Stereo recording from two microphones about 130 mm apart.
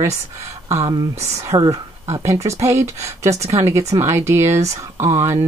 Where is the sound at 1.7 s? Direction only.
25° right (ahead or behind).